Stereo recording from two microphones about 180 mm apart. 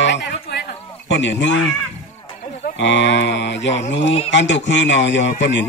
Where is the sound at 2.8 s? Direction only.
80° left.